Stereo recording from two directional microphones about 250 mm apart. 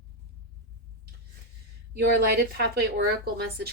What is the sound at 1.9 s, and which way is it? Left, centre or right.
Speech, right.